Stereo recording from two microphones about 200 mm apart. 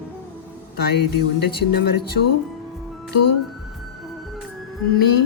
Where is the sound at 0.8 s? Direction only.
55° left (ahead or behind).